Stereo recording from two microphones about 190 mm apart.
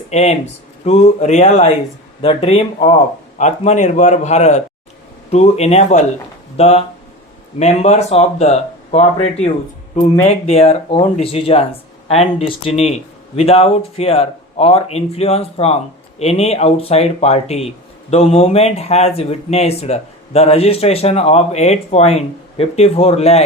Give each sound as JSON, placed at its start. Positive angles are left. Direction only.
{"t": 0.1, "sound": "speech", "side_deg": 35}